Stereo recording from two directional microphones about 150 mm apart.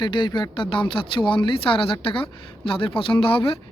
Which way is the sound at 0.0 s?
30° left (ahead or behind).